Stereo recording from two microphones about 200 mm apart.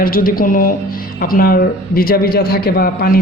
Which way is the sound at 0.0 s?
45° left (ahead or behind).